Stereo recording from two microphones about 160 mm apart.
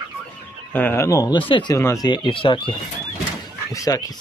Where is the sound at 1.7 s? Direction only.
15° left (ahead or behind).